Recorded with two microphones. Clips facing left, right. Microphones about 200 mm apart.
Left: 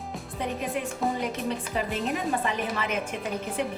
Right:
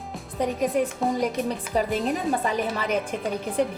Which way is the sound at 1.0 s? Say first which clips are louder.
Right 3 dB; centre (ahead or behind).